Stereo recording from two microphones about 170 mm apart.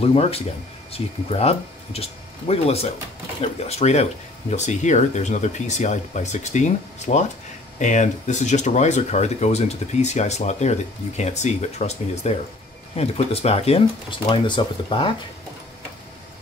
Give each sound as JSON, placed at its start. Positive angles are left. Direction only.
{"t": 0.0, "sound": "speech", "side_deg": 35}